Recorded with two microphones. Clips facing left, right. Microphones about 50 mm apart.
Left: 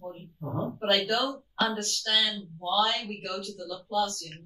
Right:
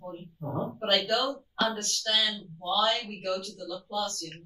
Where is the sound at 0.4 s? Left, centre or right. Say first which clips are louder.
Even; centre.